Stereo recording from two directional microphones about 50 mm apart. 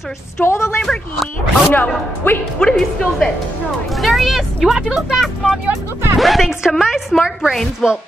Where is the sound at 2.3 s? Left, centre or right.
Left.